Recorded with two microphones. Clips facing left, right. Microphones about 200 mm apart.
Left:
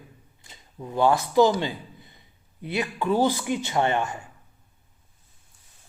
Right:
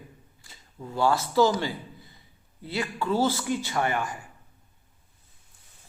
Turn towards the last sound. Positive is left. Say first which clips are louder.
# left 4 dB
turn(degrees=25)  # may be behind; listen again after turning